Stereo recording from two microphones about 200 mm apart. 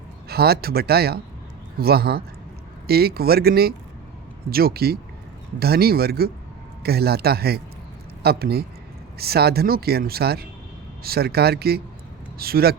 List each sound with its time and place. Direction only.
0.3 s speech: 50° right (ahead or behind)